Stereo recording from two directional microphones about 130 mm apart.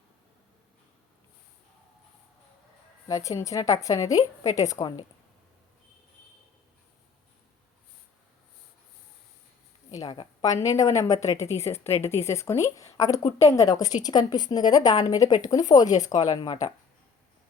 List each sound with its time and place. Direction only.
3.1 s a woman's voice: 25° left (ahead or behind)
9.9 s a sound: 25° left (ahead or behind)
10.6 s a woman's voice: 25° left (ahead or behind)